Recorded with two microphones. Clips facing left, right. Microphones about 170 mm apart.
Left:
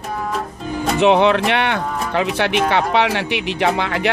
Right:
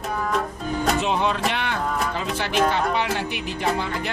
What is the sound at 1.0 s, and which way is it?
Speech, 75° left (ahead or behind).